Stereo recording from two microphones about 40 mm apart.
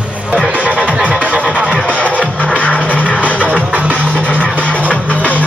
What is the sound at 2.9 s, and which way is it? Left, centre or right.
Music, right.